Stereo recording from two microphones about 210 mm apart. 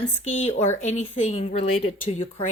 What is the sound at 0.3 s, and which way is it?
Speech, 35° left (ahead or behind).